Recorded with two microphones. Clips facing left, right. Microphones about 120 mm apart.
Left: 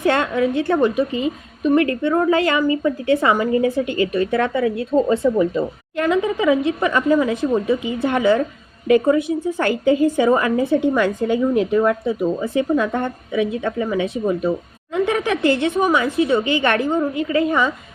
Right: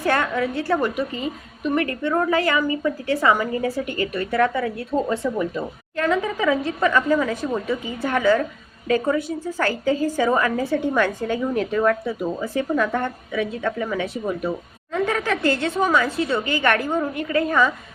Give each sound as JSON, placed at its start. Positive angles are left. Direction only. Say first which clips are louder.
{"t": 0.0, "sound": "a woman's voice", "louder": "left 4 dB", "side_deg": 25}